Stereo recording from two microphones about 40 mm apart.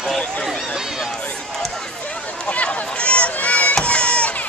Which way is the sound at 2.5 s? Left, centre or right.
Left.